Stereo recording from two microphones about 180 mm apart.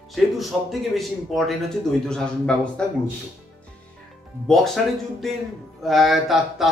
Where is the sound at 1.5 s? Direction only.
5° left (ahead or behind).